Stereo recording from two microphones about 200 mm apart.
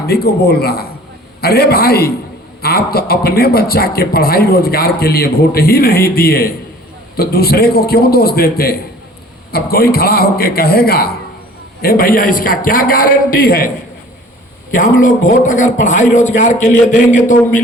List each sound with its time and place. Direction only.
0.1 s a man's voice: 55° left (ahead or behind)
14.7 s a man's voice: 40° left (ahead or behind)